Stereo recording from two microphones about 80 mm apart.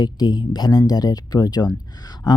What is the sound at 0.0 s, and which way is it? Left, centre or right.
Speech, left.